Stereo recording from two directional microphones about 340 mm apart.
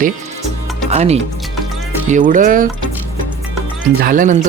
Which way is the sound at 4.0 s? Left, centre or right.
Right.